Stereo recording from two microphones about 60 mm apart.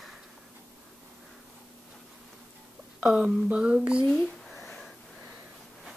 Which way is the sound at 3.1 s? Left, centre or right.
Centre.